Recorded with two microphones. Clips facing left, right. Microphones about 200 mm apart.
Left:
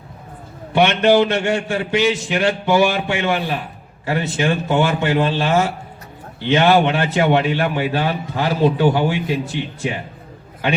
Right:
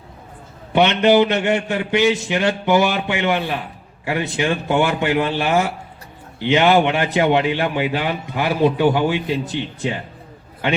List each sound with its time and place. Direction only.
0.7 s a man's voice: 20° right (ahead or behind)